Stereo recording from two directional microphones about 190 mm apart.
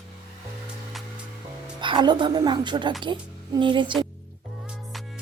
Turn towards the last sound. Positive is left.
turn(degrees=-25)  # may be behind; listen again after turning